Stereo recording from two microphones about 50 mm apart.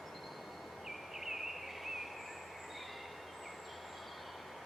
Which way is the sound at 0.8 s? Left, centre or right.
Centre.